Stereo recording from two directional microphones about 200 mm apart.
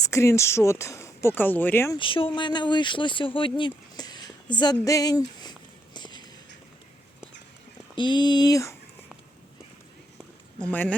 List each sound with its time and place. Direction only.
0.0 s speech: 15° left (ahead or behind)
2.0 s speech: 25° left (ahead or behind)
7.9 s speech: 25° left (ahead or behind)
10.6 s speech: 5° left (ahead or behind)